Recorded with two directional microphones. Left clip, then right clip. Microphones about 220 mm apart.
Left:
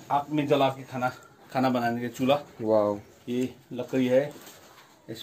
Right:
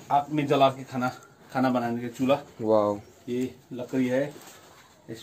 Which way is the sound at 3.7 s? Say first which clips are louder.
Left 3 dB; 35° left (ahead or behind).